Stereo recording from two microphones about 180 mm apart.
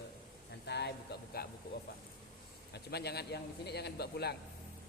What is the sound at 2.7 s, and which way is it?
A man's voice, 65° left (ahead or behind).